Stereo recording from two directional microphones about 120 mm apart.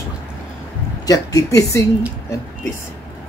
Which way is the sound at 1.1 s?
30° left (ahead or behind).